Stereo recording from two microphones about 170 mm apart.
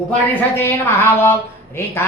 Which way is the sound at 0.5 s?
15° left (ahead or behind).